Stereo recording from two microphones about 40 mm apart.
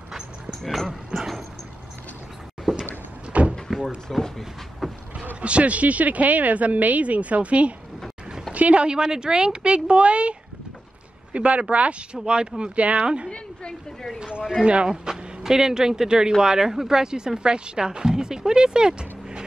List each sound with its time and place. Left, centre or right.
1.1 s dog: centre
2.7 s a sound: centre
3.3 s door: right
4.1 s speech: centre
5.4 s speech: right
11.3 s speech: right
14.6 s speech: right
14.9 s speech: centre